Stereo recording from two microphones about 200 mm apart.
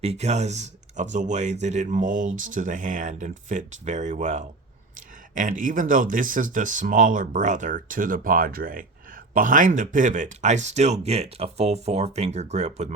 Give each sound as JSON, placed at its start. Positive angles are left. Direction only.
{"t": 0.0, "sound": "speech", "side_deg": -35}